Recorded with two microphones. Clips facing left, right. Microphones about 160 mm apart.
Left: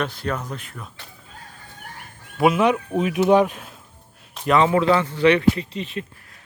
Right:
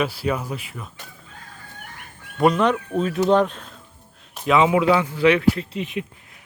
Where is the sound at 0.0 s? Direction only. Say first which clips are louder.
Right 3 dB; 5° right (ahead or behind).